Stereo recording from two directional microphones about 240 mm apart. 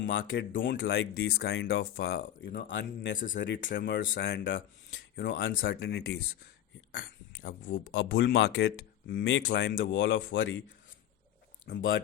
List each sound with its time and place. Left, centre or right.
0.1 s speech: left
3.3 s speech: left
7.4 s speech: left
11.7 s speech: left